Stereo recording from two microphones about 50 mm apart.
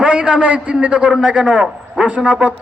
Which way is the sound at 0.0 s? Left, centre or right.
Right.